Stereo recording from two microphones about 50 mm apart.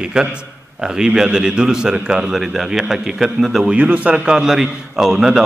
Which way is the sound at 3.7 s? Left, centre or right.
Right.